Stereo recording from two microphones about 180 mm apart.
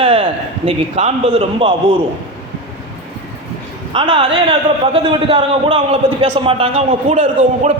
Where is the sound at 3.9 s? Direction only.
30° right (ahead or behind).